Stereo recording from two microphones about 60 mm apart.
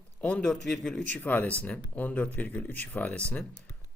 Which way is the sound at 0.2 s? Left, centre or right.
Centre.